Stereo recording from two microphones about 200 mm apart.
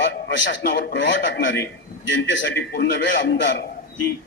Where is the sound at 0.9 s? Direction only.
65° left (ahead or behind).